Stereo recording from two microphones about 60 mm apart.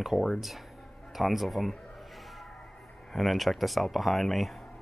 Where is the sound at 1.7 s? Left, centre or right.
Centre.